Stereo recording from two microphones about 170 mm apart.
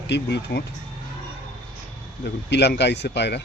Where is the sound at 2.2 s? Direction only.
80° left.